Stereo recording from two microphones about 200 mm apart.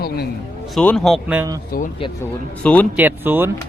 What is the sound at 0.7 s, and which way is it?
Speech, 5° left (ahead or behind).